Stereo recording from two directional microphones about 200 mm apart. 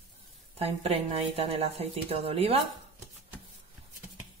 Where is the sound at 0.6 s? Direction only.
30° right (ahead or behind).